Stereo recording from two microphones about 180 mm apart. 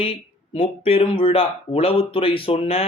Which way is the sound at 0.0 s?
30° left (ahead or behind).